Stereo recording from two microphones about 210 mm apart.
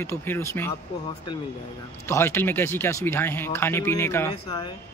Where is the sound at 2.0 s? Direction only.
10° left (ahead or behind).